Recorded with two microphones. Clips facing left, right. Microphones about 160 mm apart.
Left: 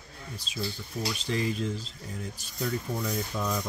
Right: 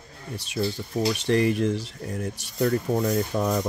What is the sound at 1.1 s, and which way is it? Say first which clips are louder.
Speech: right 8 dB; 65° right (ahead or behind).